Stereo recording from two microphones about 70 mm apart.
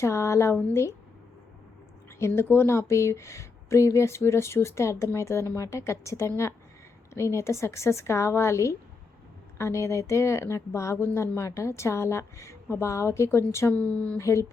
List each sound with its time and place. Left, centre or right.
0.0 s a woman's voice: left
2.1 s speech: left
13.7 s speech: left
14.2 s speech: left